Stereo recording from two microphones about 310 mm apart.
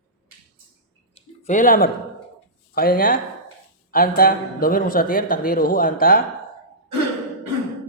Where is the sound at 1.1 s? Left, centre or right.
Left.